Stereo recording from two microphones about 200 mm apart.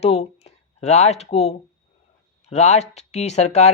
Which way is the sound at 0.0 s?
30° left (ahead or behind).